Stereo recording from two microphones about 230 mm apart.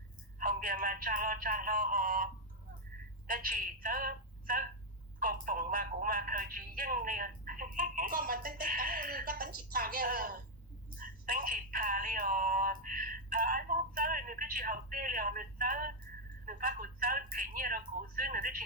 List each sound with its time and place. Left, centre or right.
0.3 s a woman's voice: right